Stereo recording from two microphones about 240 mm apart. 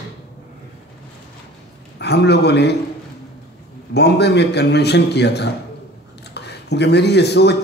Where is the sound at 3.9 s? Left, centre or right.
Left.